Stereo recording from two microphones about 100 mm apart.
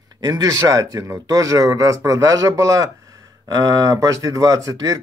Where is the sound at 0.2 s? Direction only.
40° right (ahead or behind).